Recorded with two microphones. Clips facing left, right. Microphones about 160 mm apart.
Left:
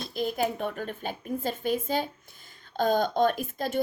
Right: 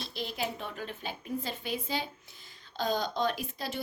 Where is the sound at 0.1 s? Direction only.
50° left (ahead or behind).